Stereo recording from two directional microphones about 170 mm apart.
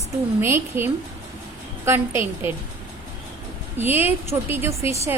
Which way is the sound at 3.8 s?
10° right (ahead or behind).